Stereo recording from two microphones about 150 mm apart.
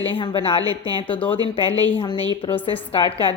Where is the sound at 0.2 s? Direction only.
35° left (ahead or behind).